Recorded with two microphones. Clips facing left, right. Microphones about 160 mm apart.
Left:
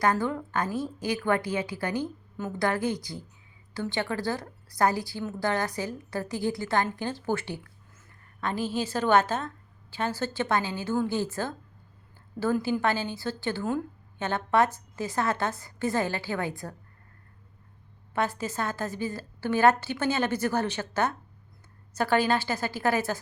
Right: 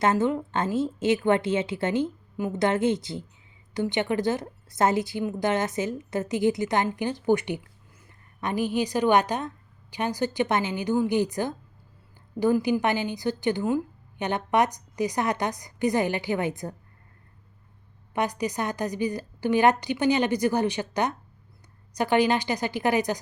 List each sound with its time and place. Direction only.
0.0 s a woman's voice: 20° right (ahead or behind)
18.1 s a woman's voice: 15° right (ahead or behind)